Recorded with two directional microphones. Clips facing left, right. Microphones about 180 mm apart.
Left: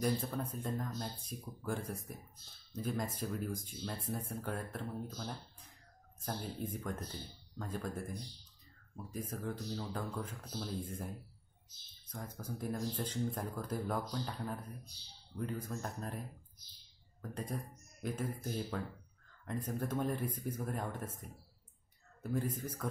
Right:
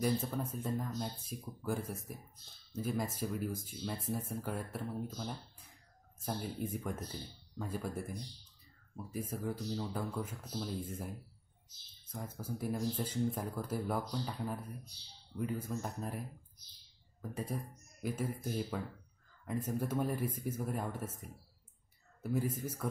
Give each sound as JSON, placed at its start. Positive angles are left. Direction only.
{"t": 0.0, "sound": "speech", "side_deg": -5}
{"t": 17.2, "sound": "speech", "side_deg": -5}